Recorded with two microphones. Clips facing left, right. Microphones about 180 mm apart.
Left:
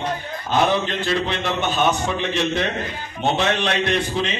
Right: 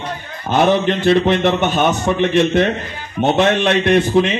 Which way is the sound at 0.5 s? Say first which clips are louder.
Right 6 dB; 55° right (ahead or behind).